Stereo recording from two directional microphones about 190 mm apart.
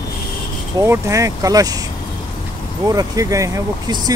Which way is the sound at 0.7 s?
15° right (ahead or behind).